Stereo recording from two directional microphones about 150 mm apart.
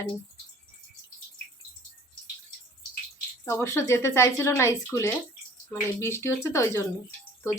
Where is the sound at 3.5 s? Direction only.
20° left (ahead or behind).